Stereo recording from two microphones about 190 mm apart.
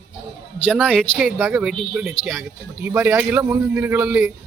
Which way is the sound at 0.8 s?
5° left (ahead or behind).